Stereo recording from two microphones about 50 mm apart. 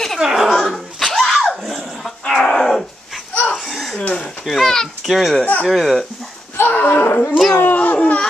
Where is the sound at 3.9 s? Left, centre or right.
Left.